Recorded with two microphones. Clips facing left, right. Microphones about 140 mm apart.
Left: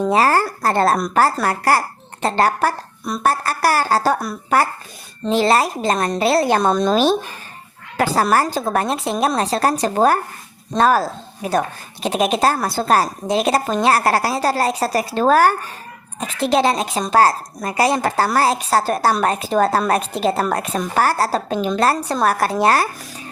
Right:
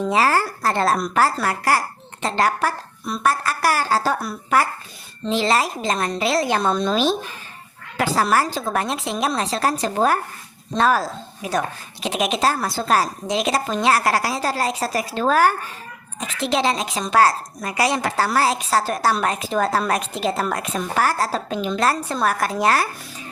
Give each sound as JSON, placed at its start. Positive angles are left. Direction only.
{"t": 0.0, "sound": "a woman's voice", "side_deg": 45}
{"t": 5.2, "sound": "a woman's voice", "side_deg": 50}